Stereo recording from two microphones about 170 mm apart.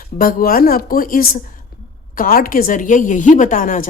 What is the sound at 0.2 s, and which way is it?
A woman's voice, 55° left (ahead or behind).